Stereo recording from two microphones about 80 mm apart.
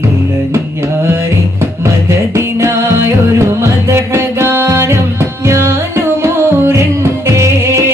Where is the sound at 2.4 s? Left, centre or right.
Right.